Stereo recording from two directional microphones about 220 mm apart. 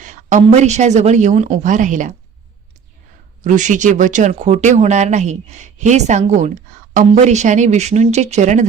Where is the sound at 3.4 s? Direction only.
35° right (ahead or behind).